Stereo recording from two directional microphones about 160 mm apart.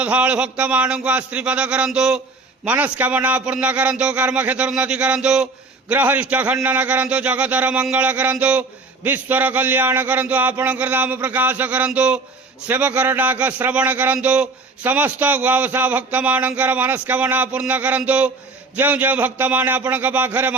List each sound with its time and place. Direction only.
0.0 s a man's voice: 10° right (ahead or behind)